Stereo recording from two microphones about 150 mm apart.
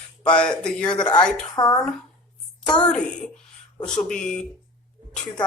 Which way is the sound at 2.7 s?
5° left (ahead or behind).